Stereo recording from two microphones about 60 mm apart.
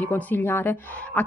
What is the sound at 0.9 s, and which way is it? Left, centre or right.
Speech, left.